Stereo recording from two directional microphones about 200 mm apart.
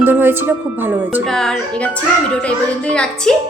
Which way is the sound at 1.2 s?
Centre (ahead or behind).